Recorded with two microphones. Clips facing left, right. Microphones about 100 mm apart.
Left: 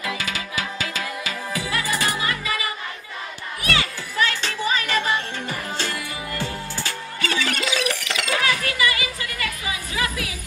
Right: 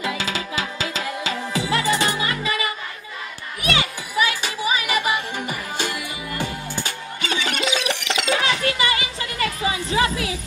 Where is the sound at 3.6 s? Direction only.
15° right (ahead or behind).